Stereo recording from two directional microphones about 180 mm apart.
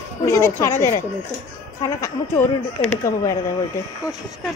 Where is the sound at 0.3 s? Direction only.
15° left (ahead or behind).